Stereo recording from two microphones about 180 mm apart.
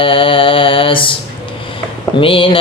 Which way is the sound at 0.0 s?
30° left (ahead or behind).